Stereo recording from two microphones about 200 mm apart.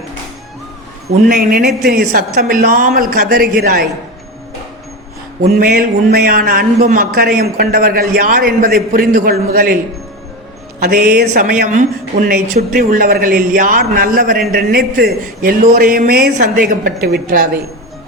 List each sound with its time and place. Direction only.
1.3 s speech: 50° right (ahead or behind)
5.5 s speech: 50° right (ahead or behind)
10.8 s speech: 50° right (ahead or behind)